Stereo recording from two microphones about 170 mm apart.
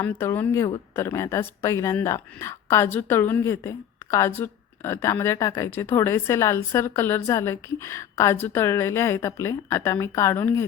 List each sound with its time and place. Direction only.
0.0 s a woman's voice: 10° left (ahead or behind)